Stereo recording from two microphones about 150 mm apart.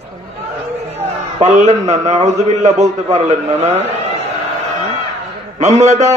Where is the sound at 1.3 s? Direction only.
50° right (ahead or behind).